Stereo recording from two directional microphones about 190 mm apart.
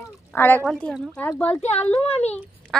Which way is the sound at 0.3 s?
10° left (ahead or behind).